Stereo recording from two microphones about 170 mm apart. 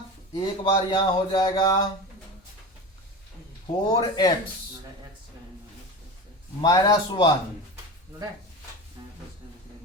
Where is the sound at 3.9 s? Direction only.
25° left (ahead or behind).